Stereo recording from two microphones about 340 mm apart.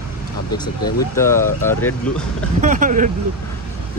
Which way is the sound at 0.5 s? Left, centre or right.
Centre.